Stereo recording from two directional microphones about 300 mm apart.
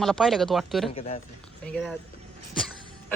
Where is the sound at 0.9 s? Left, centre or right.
Centre.